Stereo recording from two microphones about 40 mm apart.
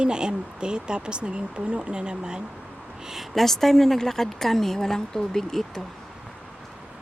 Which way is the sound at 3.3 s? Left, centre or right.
Centre.